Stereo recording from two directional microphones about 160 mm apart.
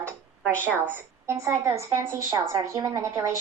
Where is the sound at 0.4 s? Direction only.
15° right (ahead or behind).